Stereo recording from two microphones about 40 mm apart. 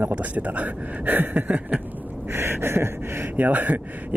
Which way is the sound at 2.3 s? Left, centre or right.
Right.